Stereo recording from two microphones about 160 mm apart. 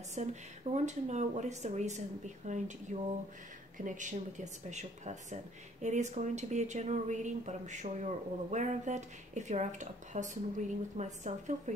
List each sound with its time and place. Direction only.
0.1 s speech: 45° right (ahead or behind)